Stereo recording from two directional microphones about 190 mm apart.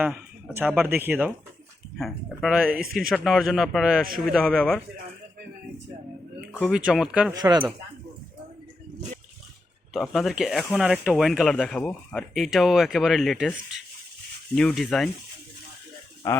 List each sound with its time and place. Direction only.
0.0 s speech: 10° right (ahead or behind)
2.0 s speech: centre (ahead or behind)
6.5 s speech: 5° right (ahead or behind)
7.4 s speech: 20° right (ahead or behind)
9.9 s speech: centre (ahead or behind)
14.5 s speech: 5° left (ahead or behind)
16.2 s speech: 15° left (ahead or behind)